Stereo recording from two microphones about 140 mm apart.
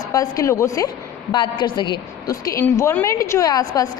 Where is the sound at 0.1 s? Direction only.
25° left (ahead or behind).